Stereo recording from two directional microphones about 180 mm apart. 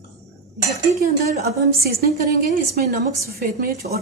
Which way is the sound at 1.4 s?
60° right (ahead or behind).